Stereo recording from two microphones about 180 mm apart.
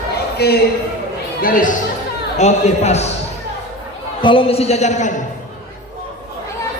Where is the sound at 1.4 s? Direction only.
50° left (ahead or behind).